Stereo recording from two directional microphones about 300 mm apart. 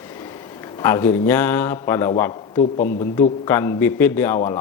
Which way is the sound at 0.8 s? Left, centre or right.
Centre.